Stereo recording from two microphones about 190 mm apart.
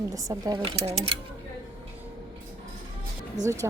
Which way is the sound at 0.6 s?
30° right (ahead or behind).